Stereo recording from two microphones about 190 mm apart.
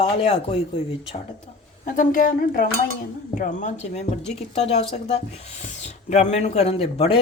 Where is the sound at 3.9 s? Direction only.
35° left (ahead or behind).